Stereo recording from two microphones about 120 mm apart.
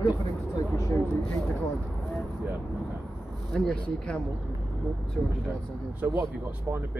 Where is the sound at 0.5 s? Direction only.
25° left (ahead or behind).